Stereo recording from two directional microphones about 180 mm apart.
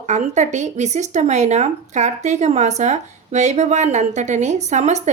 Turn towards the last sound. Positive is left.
turn(degrees=-40)  # may be behind; listen again after turning